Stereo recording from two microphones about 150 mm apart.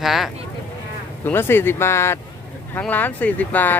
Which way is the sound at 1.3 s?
15° left (ahead or behind).